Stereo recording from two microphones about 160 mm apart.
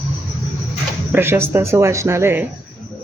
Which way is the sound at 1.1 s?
15° right (ahead or behind).